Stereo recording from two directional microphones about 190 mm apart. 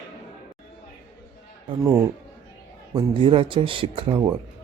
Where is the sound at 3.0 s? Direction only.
25° right (ahead or behind).